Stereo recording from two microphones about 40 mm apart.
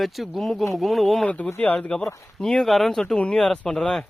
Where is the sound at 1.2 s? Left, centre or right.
Left.